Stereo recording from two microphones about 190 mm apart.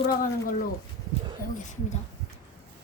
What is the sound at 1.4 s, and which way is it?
Speech, 40° left (ahead or behind).